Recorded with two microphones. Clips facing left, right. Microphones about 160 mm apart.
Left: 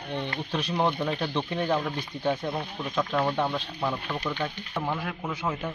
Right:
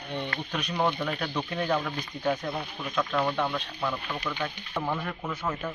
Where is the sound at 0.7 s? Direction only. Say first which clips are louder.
Left 1 dB; 15° left (ahead or behind).